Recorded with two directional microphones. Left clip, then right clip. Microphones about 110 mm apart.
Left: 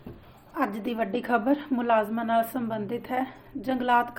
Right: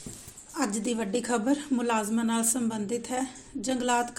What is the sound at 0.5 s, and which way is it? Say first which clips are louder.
A woman's voice: left 1 dB; 55° right (ahead or behind).